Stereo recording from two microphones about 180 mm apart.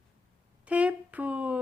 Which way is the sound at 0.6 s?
10° right (ahead or behind).